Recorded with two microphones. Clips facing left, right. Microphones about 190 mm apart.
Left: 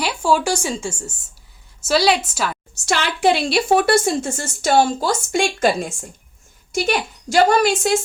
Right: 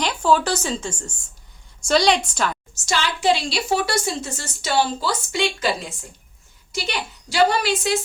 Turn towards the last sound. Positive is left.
turn(degrees=50)  # may be behind; listen again after turning